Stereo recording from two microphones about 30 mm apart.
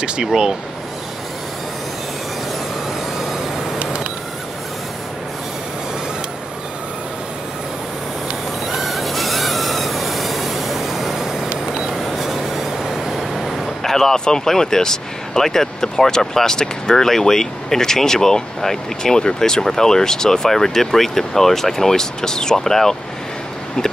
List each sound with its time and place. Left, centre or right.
0.2 s speech: right
3.8 s a sound: right
8.6 s vehicle: centre
11.4 s vehicle: right
11.9 s vehicle: centre
13.8 s artillery fire: centre
14.1 s speech: left